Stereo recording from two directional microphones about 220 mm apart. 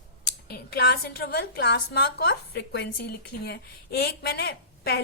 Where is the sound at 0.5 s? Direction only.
45° left (ahead or behind).